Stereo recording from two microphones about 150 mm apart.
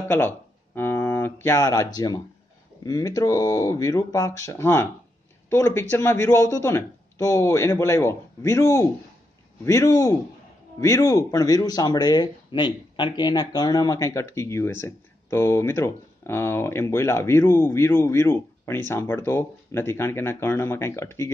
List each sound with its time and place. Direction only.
0.7 s speech: 15° left (ahead or behind)